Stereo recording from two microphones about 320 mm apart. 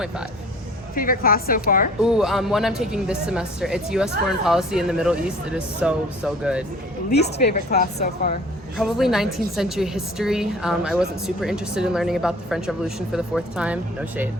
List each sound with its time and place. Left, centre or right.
0.9 s a woman's voice: left
2.0 s a woman's voice: centre
7.1 s a woman's voice: left
8.8 s a woman's voice: centre